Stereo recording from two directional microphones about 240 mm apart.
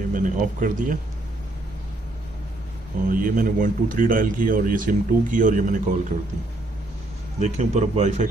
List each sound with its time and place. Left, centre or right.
0.1 s speech: right
3.1 s a man's voice: right
7.3 s a man's voice: right